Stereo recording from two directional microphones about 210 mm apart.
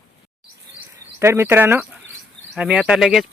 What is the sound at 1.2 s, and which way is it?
Speech, 10° right (ahead or behind).